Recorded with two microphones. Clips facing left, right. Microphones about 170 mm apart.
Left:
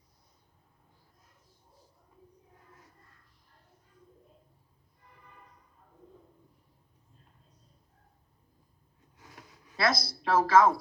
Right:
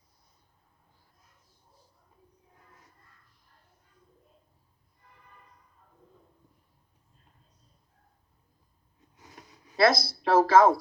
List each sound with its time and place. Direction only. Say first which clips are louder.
9.7 s speech: right 6 dB; 30° right (ahead or behind)